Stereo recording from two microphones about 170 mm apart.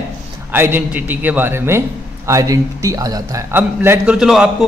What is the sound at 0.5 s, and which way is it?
A man's voice, 10° right (ahead or behind).